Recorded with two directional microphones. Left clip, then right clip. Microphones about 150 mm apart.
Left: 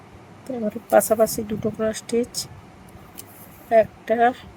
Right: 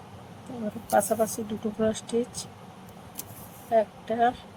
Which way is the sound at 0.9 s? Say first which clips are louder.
Left 7 dB; 90° left.